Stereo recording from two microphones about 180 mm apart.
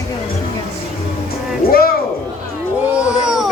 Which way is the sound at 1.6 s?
55° left (ahead or behind).